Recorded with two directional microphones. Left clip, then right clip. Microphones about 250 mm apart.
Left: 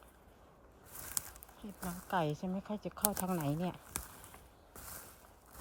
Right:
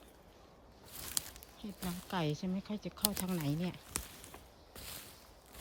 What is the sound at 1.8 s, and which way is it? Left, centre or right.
Speech, centre.